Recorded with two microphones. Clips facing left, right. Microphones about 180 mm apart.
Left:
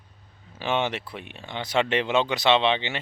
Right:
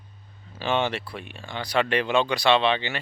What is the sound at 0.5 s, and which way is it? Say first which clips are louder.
Speech: right 1 dB; 15° left (ahead or behind).